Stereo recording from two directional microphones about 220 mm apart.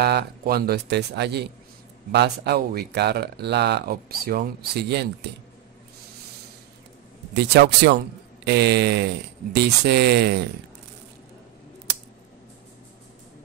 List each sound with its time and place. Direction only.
0.0 s speech: 45° right (ahead or behind)
7.3 s speech: 50° right (ahead or behind)